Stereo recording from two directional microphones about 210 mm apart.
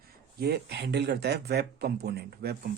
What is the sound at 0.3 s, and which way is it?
Speech, 50° right (ahead or behind).